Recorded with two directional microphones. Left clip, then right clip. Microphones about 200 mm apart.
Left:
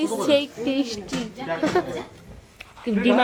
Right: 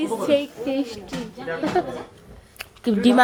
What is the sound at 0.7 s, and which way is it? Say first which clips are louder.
Speech: right 1 dB; 15° left (ahead or behind).